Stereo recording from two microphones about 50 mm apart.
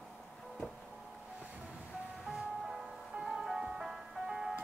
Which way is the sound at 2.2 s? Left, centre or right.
Centre.